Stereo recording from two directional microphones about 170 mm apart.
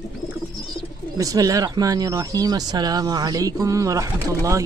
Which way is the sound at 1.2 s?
20° right (ahead or behind).